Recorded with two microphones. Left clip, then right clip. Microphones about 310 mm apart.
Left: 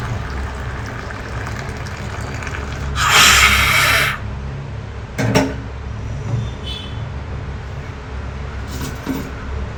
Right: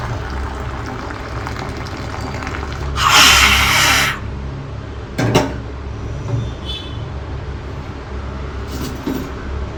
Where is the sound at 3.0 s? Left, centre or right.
Centre.